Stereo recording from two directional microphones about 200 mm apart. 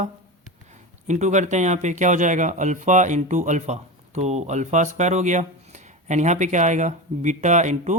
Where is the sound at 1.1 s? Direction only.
35° right (ahead or behind).